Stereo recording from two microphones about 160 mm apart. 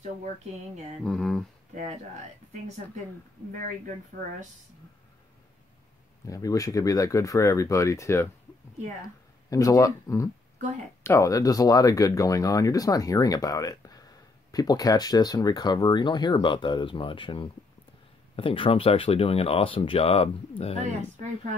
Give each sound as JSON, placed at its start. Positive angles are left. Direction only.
{"t": 1.0, "sound": "speech", "side_deg": 5}
{"t": 6.2, "sound": "speech", "side_deg": 20}